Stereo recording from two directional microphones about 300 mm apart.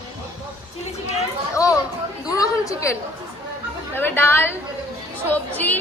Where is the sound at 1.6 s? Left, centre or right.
Centre.